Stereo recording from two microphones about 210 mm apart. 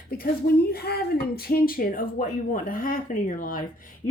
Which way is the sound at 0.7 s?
50° left (ahead or behind).